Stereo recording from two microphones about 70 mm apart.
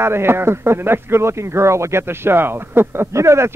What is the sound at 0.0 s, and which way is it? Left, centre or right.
Speech, right.